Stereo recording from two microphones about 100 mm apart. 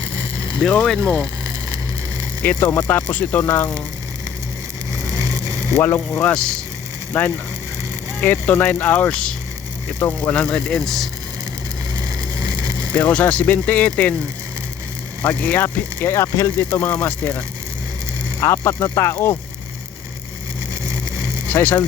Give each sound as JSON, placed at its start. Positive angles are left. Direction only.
{"t": 0.6, "sound": "speech", "side_deg": 10}
{"t": 2.4, "sound": "speech", "side_deg": 20}
{"t": 5.8, "sound": "speech", "side_deg": 20}
{"t": 12.9, "sound": "speech", "side_deg": 15}
{"t": 15.2, "sound": "speech", "side_deg": 20}
{"t": 16.6, "sound": "speech", "side_deg": 15}
{"t": 18.3, "sound": "speech", "side_deg": 30}
{"t": 21.5, "sound": "speech", "side_deg": 20}